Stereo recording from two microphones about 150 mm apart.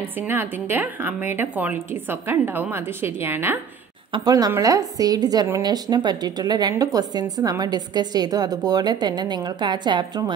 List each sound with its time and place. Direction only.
0.3 s a woman's voice: 15° right (ahead or behind)
4.1 s a woman's voice: 25° right (ahead or behind)